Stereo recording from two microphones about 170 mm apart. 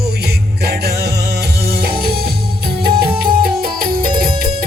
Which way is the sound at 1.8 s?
65° right (ahead or behind).